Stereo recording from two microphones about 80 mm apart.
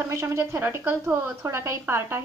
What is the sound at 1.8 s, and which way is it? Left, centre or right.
Speech, right.